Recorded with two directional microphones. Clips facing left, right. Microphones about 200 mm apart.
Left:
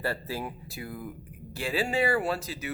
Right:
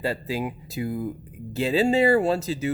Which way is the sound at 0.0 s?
15° right (ahead or behind).